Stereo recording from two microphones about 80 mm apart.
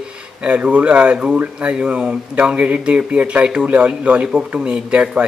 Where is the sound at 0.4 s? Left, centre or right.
Centre.